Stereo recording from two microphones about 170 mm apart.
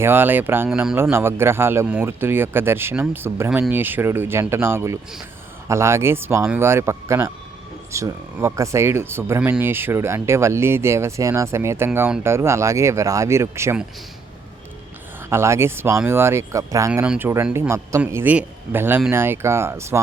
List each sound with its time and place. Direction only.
0.0 s speech: 10° right (ahead or behind)
15.3 s speech: 15° right (ahead or behind)